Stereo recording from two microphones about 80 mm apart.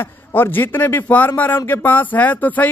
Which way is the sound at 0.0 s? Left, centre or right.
Left.